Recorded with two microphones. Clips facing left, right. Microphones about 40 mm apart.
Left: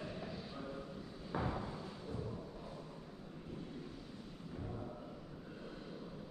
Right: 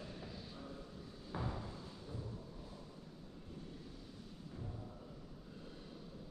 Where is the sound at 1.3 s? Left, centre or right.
Left.